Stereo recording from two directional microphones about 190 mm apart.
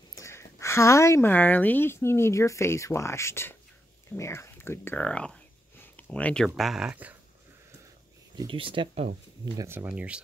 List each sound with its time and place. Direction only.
0.1 s speech: 15° left (ahead or behind)
4.1 s a sound: 15° left (ahead or behind)
6.1 s speech: 5° left (ahead or behind)
8.4 s speech: 25° right (ahead or behind)
9.6 s speech: 10° right (ahead or behind)